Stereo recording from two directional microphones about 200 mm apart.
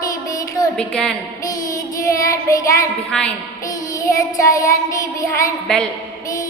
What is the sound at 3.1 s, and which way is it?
Speech, 5° left (ahead or behind).